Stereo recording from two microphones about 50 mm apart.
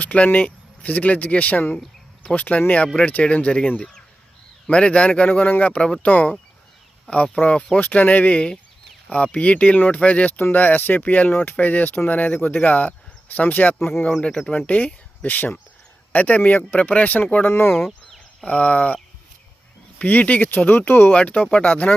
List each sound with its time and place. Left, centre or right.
0.0 s speech: left
4.7 s speech: left
7.8 s speech: left
14.2 s speech: centre
15.2 s speech: left
17.4 s speech: left
18.4 s speech: left
20.0 s speech: left
21.1 s speech: left